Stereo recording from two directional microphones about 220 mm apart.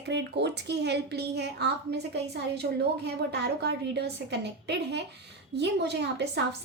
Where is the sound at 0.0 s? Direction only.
50° right (ahead or behind).